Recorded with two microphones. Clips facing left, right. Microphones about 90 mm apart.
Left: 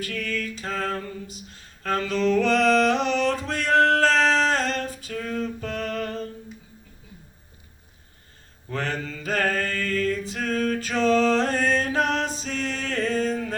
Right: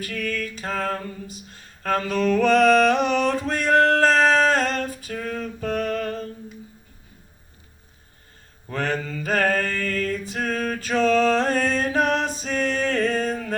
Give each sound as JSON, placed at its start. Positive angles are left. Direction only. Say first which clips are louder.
{"t": 0.0, "sound": "music", "louder": "right 1 dB", "side_deg": -45}
{"t": 5.0, "sound": "a sound", "louder": "even", "side_deg": -45}
{"t": 8.7, "sound": "mantra", "louder": "right 3 dB", "side_deg": -45}
{"t": 11.2, "sound": "music", "louder": "right 1 dB", "side_deg": -45}